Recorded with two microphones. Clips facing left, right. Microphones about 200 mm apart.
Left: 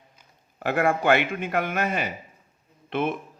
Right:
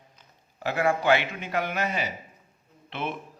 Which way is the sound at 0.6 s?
55° left (ahead or behind).